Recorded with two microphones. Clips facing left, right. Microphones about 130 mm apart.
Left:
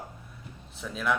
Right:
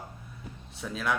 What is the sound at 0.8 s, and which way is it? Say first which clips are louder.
Speech: right 1 dB; 5° right (ahead or behind).